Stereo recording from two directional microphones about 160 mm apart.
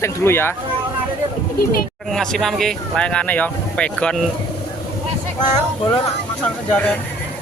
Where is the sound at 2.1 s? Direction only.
5° left (ahead or behind).